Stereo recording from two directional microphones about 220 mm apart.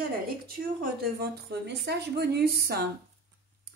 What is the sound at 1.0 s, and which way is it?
A woman's voice, 45° right (ahead or behind).